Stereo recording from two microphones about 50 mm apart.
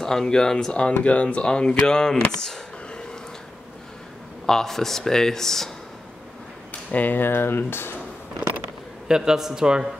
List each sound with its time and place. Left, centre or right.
0.0 s speech: centre
1.0 s speech: left
2.4 s a sound: centre
4.5 s speech: centre
6.9 s speech: left
9.0 s a man's voice: centre